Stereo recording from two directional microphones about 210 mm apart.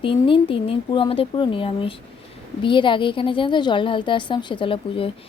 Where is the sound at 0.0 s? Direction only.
25° left (ahead or behind).